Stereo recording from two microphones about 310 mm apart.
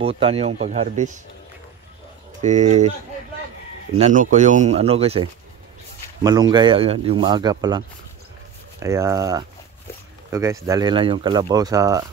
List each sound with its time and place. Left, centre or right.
0.0 s speech: centre
2.4 s speech: right
3.9 s speech: right